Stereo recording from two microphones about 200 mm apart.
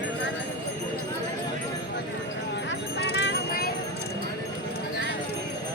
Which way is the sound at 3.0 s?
60° left (ahead or behind).